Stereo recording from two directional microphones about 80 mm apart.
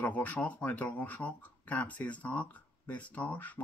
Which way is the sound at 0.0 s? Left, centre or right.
Centre.